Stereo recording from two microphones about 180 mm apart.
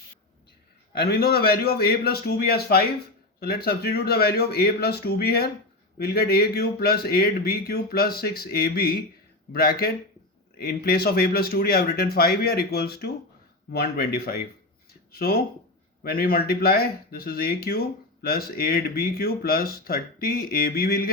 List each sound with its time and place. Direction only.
0.9 s speech: 60° left (ahead or behind)